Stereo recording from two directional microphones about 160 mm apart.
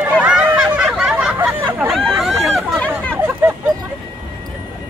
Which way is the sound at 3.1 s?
10° right (ahead or behind).